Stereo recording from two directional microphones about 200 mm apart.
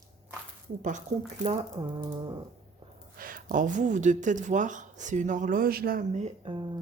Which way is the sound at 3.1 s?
45° right (ahead or behind).